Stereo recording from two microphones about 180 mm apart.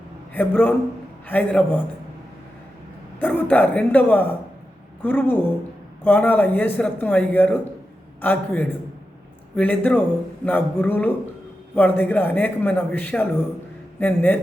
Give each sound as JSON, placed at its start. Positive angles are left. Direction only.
{"t": 0.3, "sound": "a man's voice", "side_deg": 10}
{"t": 3.2, "sound": "a man's voice", "side_deg": 10}